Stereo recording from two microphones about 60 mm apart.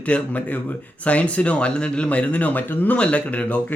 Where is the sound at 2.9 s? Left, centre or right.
Centre.